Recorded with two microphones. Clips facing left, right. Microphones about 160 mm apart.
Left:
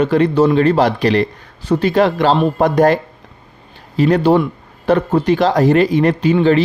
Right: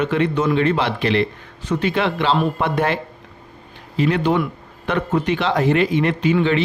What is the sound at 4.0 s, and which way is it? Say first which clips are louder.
A man's voice: left 6 dB; 40° left (ahead or behind).